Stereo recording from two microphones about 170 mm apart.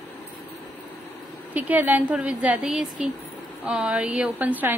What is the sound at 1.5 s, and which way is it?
A woman's voice, 10° right (ahead or behind).